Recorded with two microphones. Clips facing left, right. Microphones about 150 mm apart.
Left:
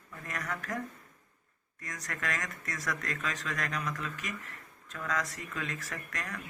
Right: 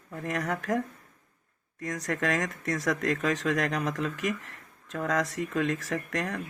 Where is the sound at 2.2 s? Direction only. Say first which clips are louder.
Right 7 dB; 70° right (ahead or behind).